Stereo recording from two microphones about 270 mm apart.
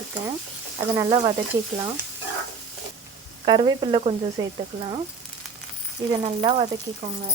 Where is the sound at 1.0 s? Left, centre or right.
Centre.